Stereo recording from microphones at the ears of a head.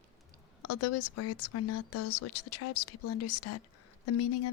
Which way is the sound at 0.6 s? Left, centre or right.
Left.